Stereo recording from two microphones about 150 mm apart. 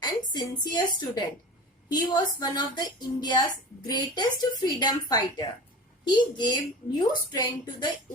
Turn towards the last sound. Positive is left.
turn(degrees=30)  # may be behind; listen again after turning